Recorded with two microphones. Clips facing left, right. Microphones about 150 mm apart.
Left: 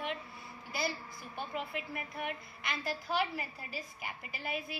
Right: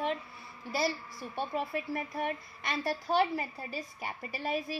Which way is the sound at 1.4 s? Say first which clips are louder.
Right 5 dB; 35° right (ahead or behind).